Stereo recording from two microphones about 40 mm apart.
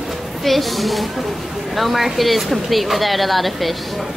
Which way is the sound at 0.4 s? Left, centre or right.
Centre.